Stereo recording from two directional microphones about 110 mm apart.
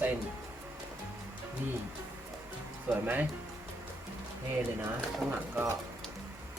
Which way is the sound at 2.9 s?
15° right (ahead or behind).